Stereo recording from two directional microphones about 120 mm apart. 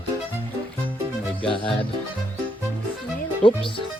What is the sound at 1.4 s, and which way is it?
Speech, 45° left (ahead or behind).